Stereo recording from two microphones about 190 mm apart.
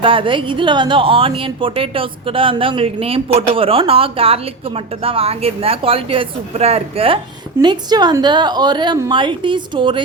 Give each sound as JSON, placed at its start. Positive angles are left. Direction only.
{"t": 0.0, "sound": "a woman's voice", "side_deg": -25}